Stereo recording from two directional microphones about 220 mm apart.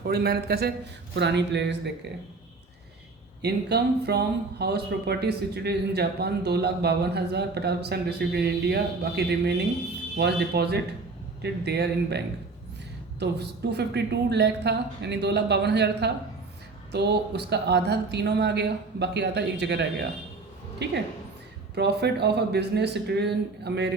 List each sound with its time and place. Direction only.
0.0 s speech: 45° right (ahead or behind)
3.4 s speech: 50° right (ahead or behind)